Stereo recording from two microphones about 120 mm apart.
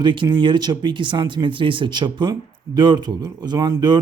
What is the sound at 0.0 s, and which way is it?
Speech, 40° right (ahead or behind).